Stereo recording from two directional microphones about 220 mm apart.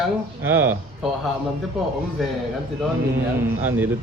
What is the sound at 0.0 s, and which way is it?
Speech, 10° right (ahead or behind).